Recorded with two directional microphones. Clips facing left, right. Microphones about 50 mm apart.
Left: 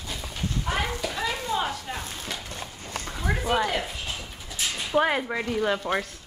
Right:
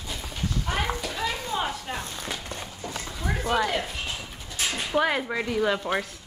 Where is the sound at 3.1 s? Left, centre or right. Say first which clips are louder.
Left 1 dB; centre.